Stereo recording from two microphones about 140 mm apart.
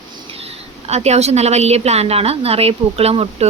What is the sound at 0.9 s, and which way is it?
Speech, 50° right (ahead or behind).